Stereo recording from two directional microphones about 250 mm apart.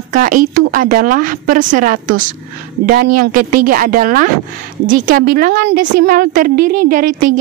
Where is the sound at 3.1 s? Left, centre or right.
Right.